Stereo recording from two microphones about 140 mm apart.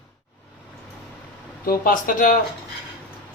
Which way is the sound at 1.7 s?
90° left.